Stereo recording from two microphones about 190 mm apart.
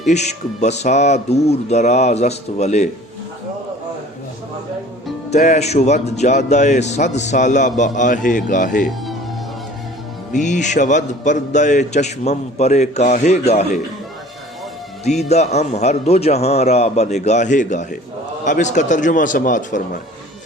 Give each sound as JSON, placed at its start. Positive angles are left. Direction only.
{"t": 0.1, "sound": "a man's voice", "side_deg": 35}
{"t": 5.3, "sound": "a man's voice", "side_deg": 40}
{"t": 10.3, "sound": "a man's voice", "side_deg": 40}
{"t": 15.0, "sound": "a man's voice", "side_deg": 35}